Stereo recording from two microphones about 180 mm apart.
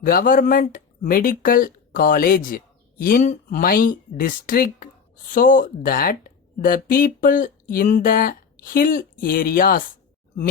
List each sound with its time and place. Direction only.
0.0 s speech: 50° left (ahead or behind)